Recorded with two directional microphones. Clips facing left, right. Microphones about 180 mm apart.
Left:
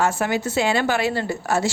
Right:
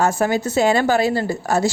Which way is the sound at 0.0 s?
40° right (ahead or behind).